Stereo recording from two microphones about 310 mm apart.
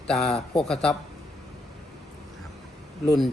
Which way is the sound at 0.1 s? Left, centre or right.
Centre.